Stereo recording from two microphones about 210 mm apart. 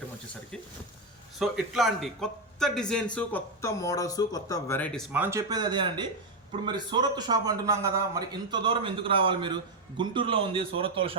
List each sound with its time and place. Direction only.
1.4 s a man's voice: centre (ahead or behind); by 11.1 s 25° right (ahead or behind)